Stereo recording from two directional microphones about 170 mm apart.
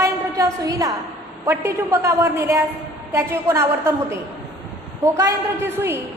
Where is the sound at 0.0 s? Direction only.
20° right (ahead or behind).